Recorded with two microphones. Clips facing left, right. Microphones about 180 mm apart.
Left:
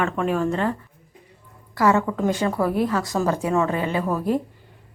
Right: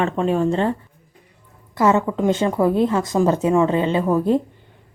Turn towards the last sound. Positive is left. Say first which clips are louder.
# right 5 dB
turn(degrees=-20)  # may be behind; listen again after turning